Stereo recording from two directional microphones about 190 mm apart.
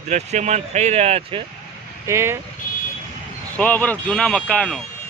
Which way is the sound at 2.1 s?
15° right (ahead or behind).